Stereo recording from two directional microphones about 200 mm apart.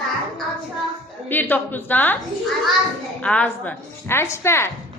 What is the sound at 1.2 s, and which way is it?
Speech, 10° left (ahead or behind).